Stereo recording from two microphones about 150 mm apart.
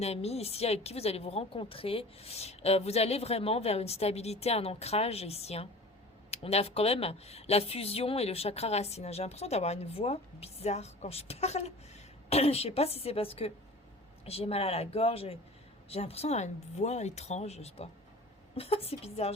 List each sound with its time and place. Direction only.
0.0 s a woman's voice: 45° left (ahead or behind)